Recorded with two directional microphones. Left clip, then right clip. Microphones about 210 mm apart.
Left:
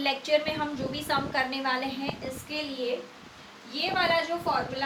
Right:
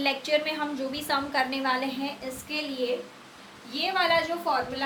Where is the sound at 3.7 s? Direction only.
25° right (ahead or behind).